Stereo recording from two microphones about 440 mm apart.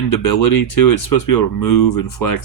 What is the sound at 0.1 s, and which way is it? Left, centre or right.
Speech, left.